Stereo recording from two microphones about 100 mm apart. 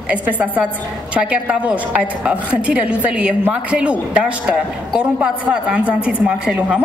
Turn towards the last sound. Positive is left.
turn(degrees=-10)  # may be behind; listen again after turning